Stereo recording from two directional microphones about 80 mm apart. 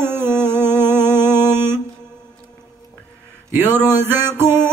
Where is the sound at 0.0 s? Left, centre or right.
Right.